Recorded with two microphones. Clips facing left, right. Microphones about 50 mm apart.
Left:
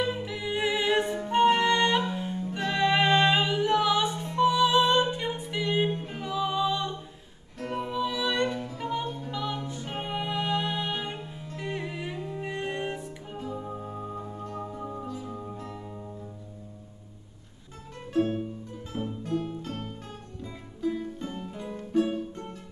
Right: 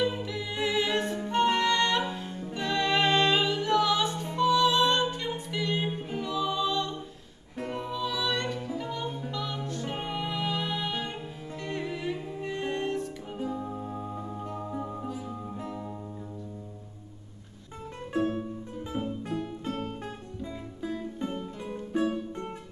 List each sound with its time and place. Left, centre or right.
0.0 s music: centre
5.9 s music: centre
6.2 s music: centre
14.3 s music: centre
18.9 s music: right